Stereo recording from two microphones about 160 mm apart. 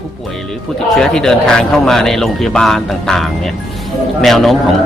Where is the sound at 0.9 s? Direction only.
5° left (ahead or behind).